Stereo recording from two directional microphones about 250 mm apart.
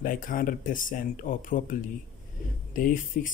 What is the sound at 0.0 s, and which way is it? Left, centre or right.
Speech, left.